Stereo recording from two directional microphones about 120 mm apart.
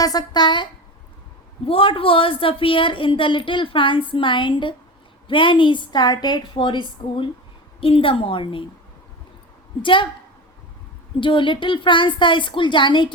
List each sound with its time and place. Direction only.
0.0 s a woman's voice: 35° left (ahead or behind)
9.8 s a woman's voice: 45° left (ahead or behind)
11.2 s a woman's voice: 45° left (ahead or behind)